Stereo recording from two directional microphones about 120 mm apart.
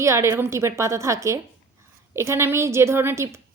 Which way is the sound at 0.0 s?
25° right (ahead or behind).